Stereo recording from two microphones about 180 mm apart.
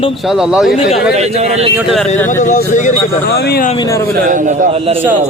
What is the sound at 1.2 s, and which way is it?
Speech, 40° right (ahead or behind).